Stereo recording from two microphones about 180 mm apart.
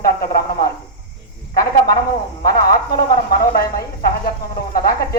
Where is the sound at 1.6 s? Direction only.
55° left (ahead or behind).